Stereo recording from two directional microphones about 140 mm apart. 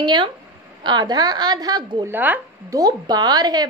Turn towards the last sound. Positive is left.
turn(degrees=-30)  # may be behind; listen again after turning